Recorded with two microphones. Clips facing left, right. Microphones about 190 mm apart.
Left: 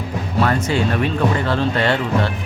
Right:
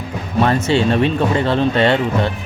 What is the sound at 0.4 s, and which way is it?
Speech, 25° right (ahead or behind).